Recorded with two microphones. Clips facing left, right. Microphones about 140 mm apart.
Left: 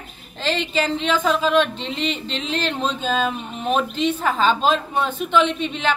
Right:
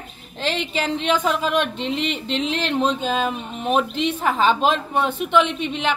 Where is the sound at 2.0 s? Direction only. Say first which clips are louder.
Even; 55° right (ahead or behind).